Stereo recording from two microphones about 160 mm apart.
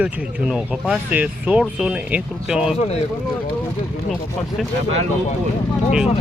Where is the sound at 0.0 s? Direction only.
5° right (ahead or behind).